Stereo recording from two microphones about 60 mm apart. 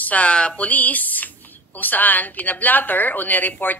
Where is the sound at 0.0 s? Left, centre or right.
Left.